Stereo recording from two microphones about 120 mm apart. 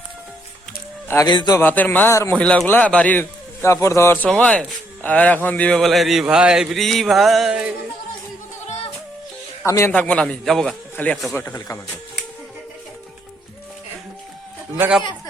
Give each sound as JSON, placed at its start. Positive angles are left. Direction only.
{"t": 1.0, "sound": "a man's voice", "side_deg": 20}
{"t": 1.3, "sound": "a man's voice", "side_deg": 40}
{"t": 1.5, "sound": "a man's voice", "side_deg": 15}
{"t": 4.3, "sound": "a man's voice", "side_deg": 10}
{"t": 9.6, "sound": "speech", "side_deg": 25}
{"t": 9.9, "sound": "a man's voice", "side_deg": 10}
{"t": 11.3, "sound": "speech", "side_deg": 25}